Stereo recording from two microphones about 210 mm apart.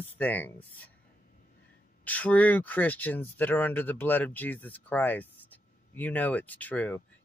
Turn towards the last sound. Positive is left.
turn(degrees=5)  # may be behind; listen again after turning